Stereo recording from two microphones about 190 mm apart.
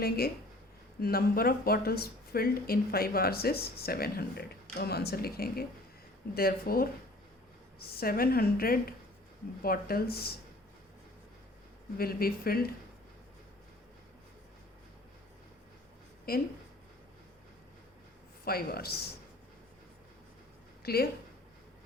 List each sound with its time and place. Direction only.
1.0 s speech: 50° left (ahead or behind)
11.9 s speech: 50° left (ahead or behind)
16.3 s speech: 50° left (ahead or behind)
18.4 s speech: 55° left (ahead or behind)
20.8 s speech: 55° left (ahead or behind)